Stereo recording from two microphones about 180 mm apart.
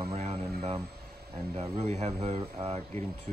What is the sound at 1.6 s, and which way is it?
Speech, 35° right (ahead or behind).